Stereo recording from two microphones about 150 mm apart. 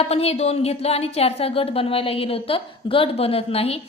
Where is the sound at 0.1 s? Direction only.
45° left (ahead or behind).